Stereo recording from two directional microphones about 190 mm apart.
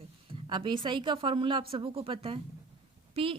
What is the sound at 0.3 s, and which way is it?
Speech, 25° right (ahead or behind).